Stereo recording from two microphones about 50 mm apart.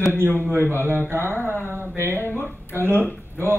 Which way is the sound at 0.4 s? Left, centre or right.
Right.